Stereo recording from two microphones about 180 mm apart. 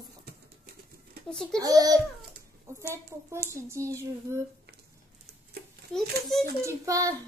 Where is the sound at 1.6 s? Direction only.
20° right (ahead or behind).